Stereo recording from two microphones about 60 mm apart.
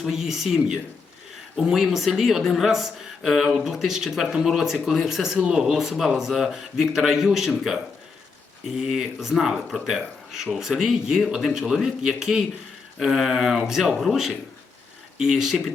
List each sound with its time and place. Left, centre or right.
0.0 s a man's voice: centre